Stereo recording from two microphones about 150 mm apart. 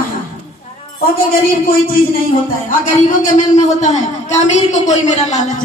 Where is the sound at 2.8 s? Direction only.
50° left (ahead or behind).